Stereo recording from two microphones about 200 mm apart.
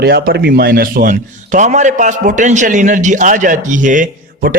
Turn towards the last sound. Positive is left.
turn(degrees=-45)  # may be behind; listen again after turning